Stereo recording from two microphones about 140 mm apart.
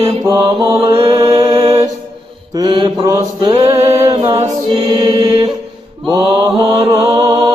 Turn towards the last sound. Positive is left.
turn(degrees=-25)  # may be behind; listen again after turning